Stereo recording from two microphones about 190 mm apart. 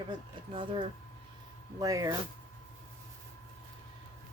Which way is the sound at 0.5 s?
25° right (ahead or behind).